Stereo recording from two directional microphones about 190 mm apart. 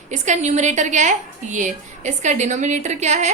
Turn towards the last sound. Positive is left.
turn(degrees=-35)  # may be behind; listen again after turning